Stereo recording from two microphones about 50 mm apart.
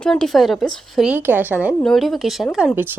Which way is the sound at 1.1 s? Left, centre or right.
Right.